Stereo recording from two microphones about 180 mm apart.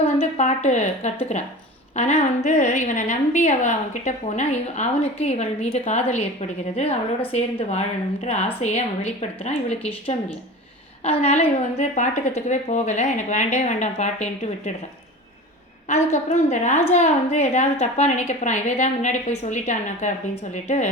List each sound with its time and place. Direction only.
0.2 s a woman's voice: 40° left (ahead or behind)
15.9 s a woman's voice: 40° left (ahead or behind)